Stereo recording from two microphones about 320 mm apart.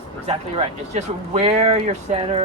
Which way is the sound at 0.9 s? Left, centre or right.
Centre.